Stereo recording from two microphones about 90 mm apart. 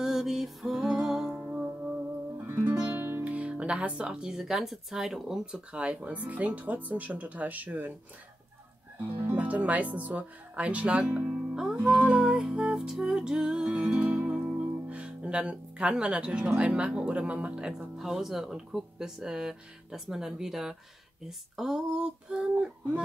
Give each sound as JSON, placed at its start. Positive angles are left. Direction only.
{"t": 0.0, "sound": "music", "side_deg": -5}
{"t": 1.4, "sound": "music", "side_deg": -15}
{"t": 2.3, "sound": "speech", "side_deg": -25}
{"t": 9.2, "sound": "speech", "side_deg": -20}
{"t": 11.8, "sound": "music", "side_deg": -15}
{"t": 21.3, "sound": "speech", "side_deg": -5}